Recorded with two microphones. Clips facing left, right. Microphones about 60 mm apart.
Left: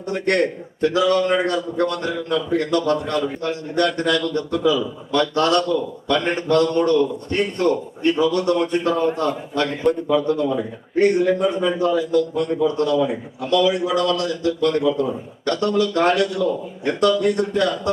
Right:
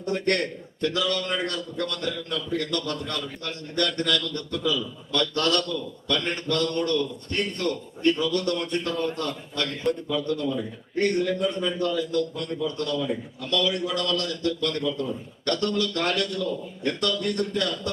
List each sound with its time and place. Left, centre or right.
0.1 s a man's voice: centre